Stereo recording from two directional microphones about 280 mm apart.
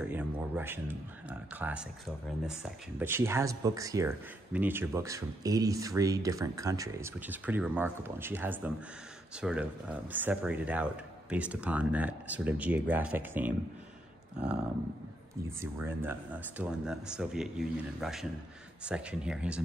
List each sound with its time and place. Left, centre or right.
0.0 s speech: centre
15.6 s speech: centre